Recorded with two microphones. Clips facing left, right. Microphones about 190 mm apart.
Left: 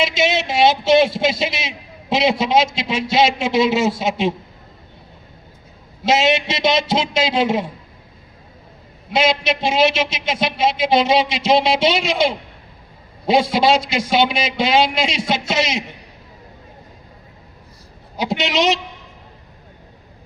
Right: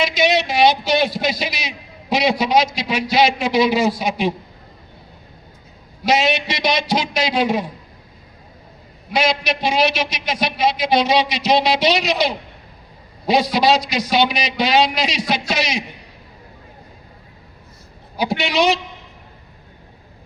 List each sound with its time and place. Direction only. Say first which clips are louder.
0.0 s a man's voice: right 1 dB; 25° left (ahead or behind)
6.0 s a man's voice: left 1 dB; 25° left (ahead or behind)
9.1 s a man's voice: left 2 dB; 25° left (ahead or behind)
18.2 s a man's voice: right 1 dB; 20° left (ahead or behind)